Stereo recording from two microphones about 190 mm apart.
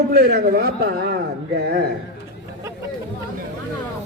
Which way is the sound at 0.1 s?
55° right (ahead or behind).